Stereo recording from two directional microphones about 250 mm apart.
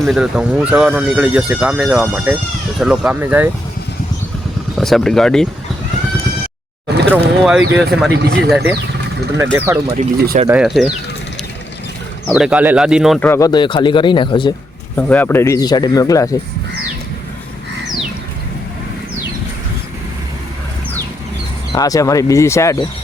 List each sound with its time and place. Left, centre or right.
0.0 s speech: centre
4.8 s speech: centre
7.1 s speech: centre
8.1 s speech: right
9.4 s speech: centre
10.0 s speech: right
10.5 s speech: centre
12.3 s speech: centre
14.9 s speech: centre
21.7 s speech: centre